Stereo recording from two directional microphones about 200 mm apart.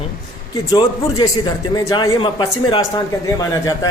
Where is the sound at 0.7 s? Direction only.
20° left (ahead or behind).